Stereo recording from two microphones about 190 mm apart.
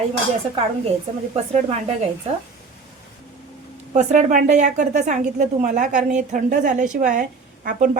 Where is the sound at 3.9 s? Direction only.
40° right (ahead or behind).